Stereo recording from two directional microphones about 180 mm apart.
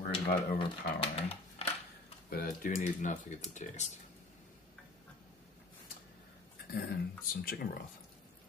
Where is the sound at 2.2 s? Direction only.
50° left (ahead or behind).